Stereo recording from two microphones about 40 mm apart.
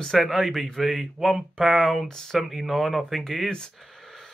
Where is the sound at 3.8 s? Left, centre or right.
Centre.